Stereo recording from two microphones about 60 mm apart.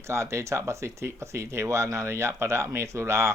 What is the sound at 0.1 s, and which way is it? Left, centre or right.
Speech, right.